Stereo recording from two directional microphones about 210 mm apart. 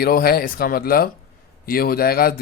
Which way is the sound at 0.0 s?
45° left (ahead or behind).